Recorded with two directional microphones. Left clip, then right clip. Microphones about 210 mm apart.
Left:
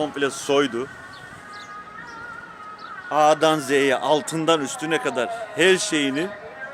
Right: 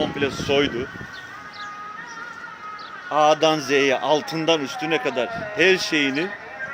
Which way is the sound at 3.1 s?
Centre (ahead or behind).